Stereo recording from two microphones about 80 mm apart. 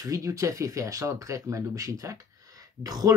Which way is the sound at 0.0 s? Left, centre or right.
Right.